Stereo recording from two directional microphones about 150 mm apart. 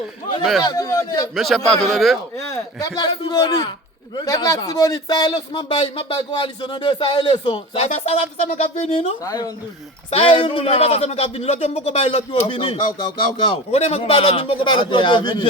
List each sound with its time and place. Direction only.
0.6 s a man's voice: 25° left (ahead or behind)
1.4 s a man's voice: centre (ahead or behind)
2.5 s a man's voice: 25° left (ahead or behind)
7.8 s speech: 45° left (ahead or behind)
9.2 s a man's voice: 25° left (ahead or behind)
10.1 s a man's voice: 40° left (ahead or behind)